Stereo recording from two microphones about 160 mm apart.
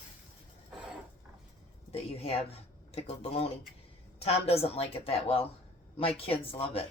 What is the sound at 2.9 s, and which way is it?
Speech, 40° left (ahead or behind).